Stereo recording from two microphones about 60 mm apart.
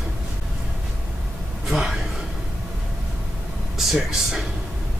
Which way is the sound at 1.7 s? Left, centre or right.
Centre.